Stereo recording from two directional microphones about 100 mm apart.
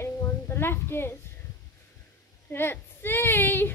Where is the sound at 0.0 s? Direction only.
25° left (ahead or behind).